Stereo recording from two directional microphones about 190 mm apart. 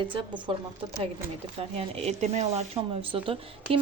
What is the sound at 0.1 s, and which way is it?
A woman's voice, 25° right (ahead or behind).